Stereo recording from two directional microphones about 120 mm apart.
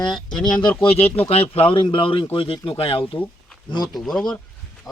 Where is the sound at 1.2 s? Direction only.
55° left (ahead or behind).